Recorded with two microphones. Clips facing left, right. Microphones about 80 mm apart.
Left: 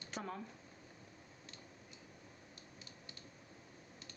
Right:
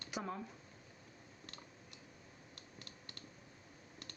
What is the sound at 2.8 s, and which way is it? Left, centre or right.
Typing, right.